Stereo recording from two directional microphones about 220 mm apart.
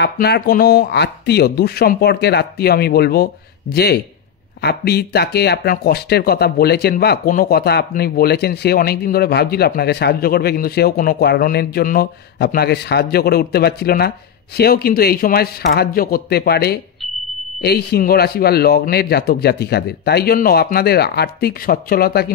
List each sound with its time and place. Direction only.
0.0 s speech: 45° left (ahead or behind)